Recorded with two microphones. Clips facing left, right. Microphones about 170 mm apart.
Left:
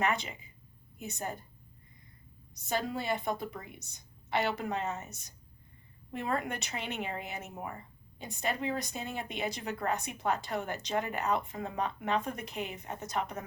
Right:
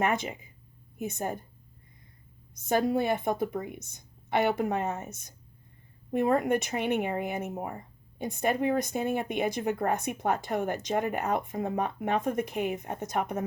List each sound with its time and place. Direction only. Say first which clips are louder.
0.0 s speech: right 4 dB; 50° right (ahead or behind)
2.6 s speech: right 7 dB; 50° right (ahead or behind)